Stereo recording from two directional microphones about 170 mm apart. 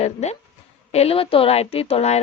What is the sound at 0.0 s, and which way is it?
Speech, 40° left (ahead or behind).